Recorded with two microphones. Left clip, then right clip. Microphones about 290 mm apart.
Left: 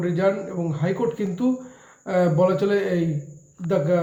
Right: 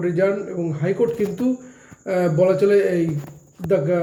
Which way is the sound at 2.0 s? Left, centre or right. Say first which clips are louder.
Right 2 dB; left.